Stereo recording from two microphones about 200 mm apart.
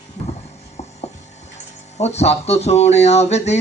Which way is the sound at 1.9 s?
35° left (ahead or behind).